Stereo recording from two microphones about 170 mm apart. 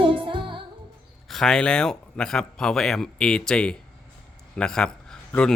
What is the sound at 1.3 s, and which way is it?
Speech, 5° left (ahead or behind).